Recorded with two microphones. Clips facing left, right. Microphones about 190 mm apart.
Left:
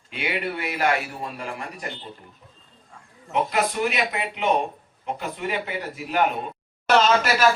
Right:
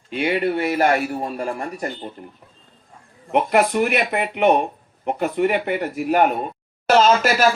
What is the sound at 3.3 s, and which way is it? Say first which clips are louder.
A man's voice: right 6 dB; 60° right (ahead or behind).